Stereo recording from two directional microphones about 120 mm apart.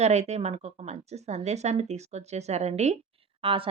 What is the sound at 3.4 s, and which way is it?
Speech, 50° right (ahead or behind).